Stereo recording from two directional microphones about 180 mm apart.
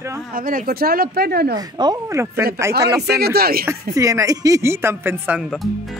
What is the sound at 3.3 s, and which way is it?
Speech, 55° right (ahead or behind).